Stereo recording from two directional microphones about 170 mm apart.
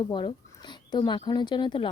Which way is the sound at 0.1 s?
30° left (ahead or behind).